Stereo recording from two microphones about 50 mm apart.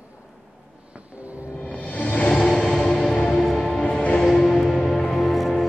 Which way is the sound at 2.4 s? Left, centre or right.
Centre.